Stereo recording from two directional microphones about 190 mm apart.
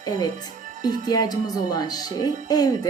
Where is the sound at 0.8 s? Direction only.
20° left (ahead or behind).